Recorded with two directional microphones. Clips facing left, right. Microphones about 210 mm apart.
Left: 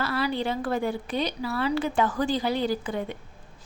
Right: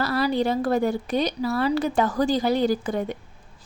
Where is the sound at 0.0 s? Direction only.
40° right (ahead or behind).